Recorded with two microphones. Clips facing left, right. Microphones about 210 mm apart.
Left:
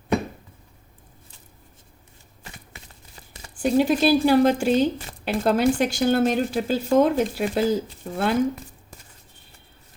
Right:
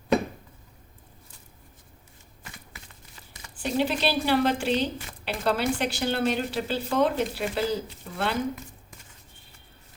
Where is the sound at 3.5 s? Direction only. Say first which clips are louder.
Left 7 dB; 45° left (ahead or behind).